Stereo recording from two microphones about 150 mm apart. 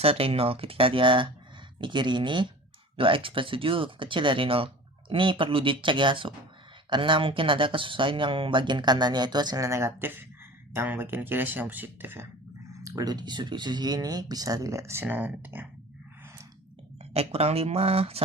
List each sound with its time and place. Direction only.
0.0 s speech: 40° right (ahead or behind); by 12.3 s 15° right (ahead or behind)
12.8 s speech: 25° right (ahead or behind)
17.2 s speech: 40° right (ahead or behind)